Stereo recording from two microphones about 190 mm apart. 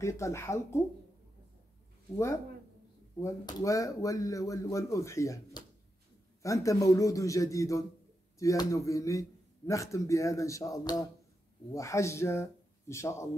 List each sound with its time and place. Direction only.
0.0 s speech: 15° left (ahead or behind)
3.2 s speech: 20° left (ahead or behind)